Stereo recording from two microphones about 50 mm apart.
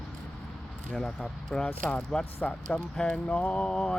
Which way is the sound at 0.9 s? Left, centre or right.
Centre.